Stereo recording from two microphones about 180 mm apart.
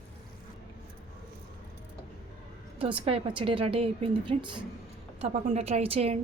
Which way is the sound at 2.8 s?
30° right (ahead or behind).